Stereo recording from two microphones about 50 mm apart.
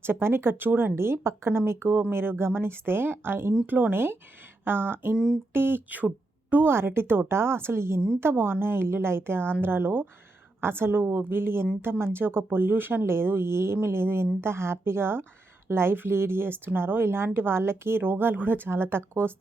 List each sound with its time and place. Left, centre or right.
0.0 s a woman's voice: right
0.7 s speech: right
0.9 s a woman's voice: right
5.1 s a sound: centre
5.5 s a woman's voice: right
8.2 s a woman's voice: right